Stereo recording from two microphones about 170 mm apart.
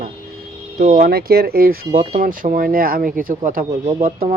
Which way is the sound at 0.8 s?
45° right (ahead or behind).